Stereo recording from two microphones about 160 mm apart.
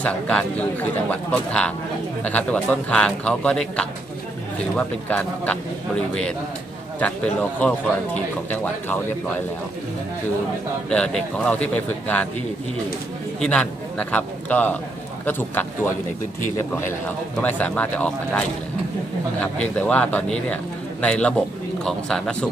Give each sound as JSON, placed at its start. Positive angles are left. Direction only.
{"t": 0.0, "sound": "speech", "side_deg": 5}
{"t": 10.9, "sound": "speech", "side_deg": 5}
{"t": 13.4, "sound": "a man's voice", "side_deg": 5}
{"t": 19.4, "sound": "speech", "side_deg": 10}